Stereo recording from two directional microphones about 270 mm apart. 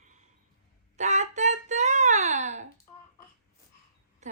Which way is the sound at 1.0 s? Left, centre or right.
Right.